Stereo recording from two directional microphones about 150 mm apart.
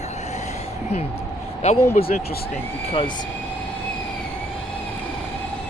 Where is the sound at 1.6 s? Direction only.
45° left (ahead or behind).